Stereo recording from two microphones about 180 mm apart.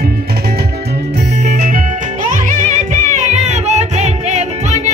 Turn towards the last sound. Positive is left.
turn(degrees=-40)  # may be behind; listen again after turning